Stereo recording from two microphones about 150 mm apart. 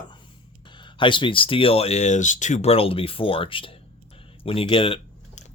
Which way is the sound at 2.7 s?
40° left (ahead or behind).